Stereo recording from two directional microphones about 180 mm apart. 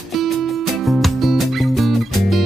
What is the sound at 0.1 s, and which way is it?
Music, centre (ahead or behind).